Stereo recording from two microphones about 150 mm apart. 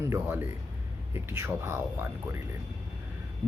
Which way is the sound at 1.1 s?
15° right (ahead or behind).